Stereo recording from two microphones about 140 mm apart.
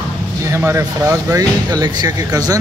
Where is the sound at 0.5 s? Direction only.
20° right (ahead or behind).